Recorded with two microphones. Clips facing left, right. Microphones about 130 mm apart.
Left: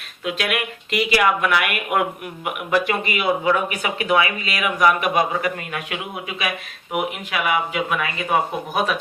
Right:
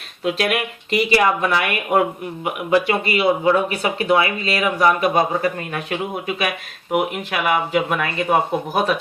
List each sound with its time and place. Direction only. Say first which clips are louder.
0.3 s speech: right 4 dB; 35° right (ahead or behind)
7.3 s speech: right 2 dB; 40° right (ahead or behind)